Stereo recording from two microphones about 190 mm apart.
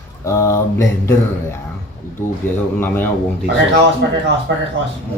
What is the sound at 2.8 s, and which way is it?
Speech, 10° left (ahead or behind).